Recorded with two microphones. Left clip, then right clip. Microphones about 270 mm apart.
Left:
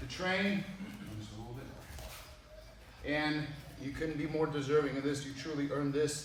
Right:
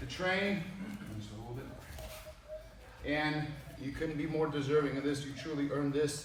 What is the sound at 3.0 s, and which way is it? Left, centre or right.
A man's voice, centre.